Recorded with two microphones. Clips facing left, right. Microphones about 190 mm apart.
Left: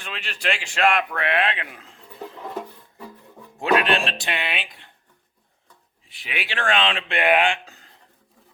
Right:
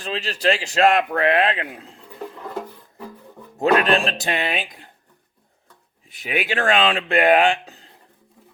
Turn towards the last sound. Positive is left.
turn(degrees=-35)  # may be behind; listen again after turning